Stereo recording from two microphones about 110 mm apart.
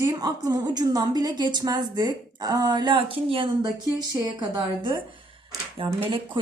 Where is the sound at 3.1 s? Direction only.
55° right (ahead or behind).